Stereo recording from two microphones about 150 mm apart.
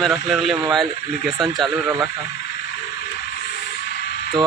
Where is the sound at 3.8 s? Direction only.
90° left.